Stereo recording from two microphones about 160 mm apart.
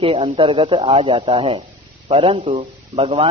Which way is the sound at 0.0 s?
35° right (ahead or behind).